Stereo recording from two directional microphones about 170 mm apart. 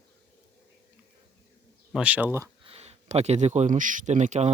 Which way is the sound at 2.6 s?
40° right (ahead or behind).